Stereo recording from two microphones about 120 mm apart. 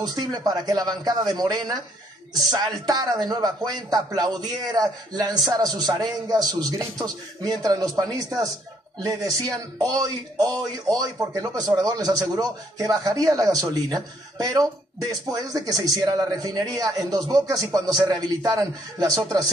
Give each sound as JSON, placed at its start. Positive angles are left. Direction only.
{"t": 0.0, "sound": "speech", "side_deg": -35}